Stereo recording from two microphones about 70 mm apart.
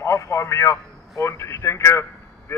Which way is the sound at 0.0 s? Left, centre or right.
Left.